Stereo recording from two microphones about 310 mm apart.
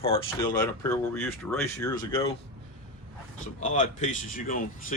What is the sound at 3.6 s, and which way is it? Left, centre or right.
Speech, left.